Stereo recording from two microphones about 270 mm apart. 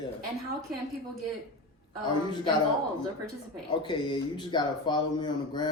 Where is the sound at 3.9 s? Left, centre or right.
Centre.